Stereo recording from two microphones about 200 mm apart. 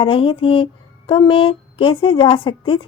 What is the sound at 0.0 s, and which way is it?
Speech, 25° left (ahead or behind).